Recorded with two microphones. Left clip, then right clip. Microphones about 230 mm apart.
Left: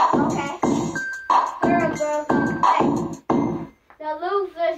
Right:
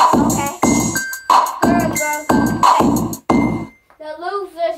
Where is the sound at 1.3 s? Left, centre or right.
Right.